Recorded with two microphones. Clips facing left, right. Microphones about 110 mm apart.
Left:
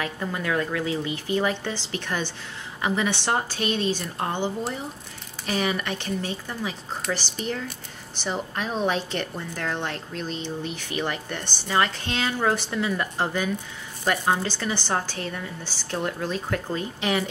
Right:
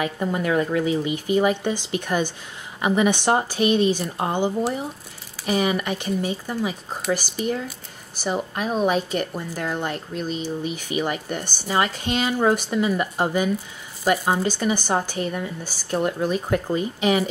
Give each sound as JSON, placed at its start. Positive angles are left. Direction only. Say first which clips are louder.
{"t": 0.0, "sound": "a woman's voice", "louder": "right 5 dB", "side_deg": -20}
{"t": 5.5, "sound": "a woman's voice", "louder": "right 4 dB", "side_deg": -10}